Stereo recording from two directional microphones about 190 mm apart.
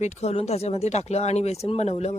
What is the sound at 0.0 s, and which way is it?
A woman's voice, 35° left (ahead or behind).